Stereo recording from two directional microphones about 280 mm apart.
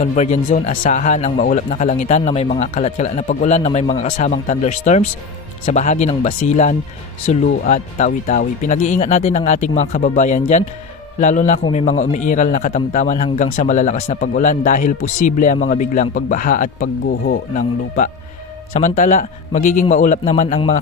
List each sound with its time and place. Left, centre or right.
0.0 s speech: left